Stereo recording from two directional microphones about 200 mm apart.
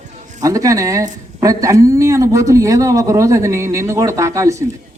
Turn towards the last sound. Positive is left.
turn(degrees=-15)  # may be behind; listen again after turning